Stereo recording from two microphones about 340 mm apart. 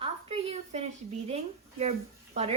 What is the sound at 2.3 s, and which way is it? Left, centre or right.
Speech, centre.